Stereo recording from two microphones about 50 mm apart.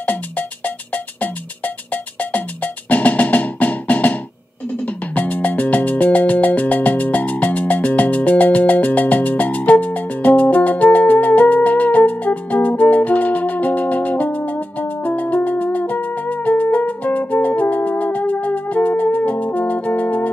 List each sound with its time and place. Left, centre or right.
0.0 s music: left